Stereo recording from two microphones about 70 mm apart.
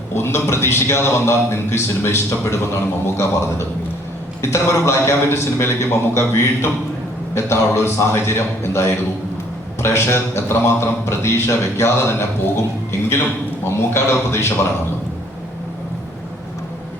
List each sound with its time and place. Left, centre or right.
0.1 s a man's voice: left